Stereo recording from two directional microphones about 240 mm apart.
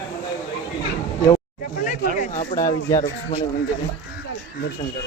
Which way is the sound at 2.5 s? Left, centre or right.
Centre.